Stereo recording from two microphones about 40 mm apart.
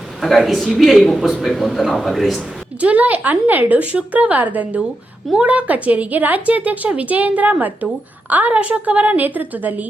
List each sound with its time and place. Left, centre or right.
0.2 s speech: centre
2.8 s a woman's voice: right
8.5 s a woman's voice: right